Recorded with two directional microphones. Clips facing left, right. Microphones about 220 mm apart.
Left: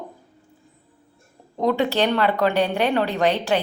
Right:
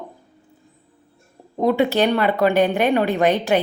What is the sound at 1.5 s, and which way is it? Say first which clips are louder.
A woman's voice: right 3 dB; 15° right (ahead or behind).